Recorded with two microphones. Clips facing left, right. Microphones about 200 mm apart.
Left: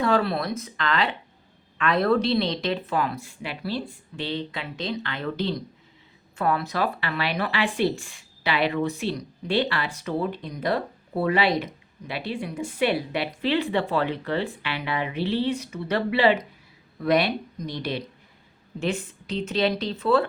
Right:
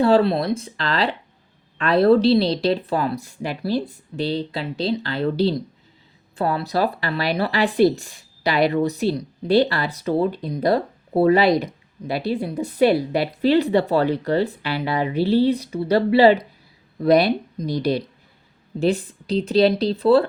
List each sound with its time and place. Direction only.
0.0 s speech: 30° right (ahead or behind)